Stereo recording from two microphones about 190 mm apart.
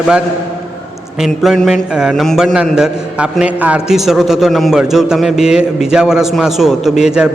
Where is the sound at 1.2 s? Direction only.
Centre (ahead or behind).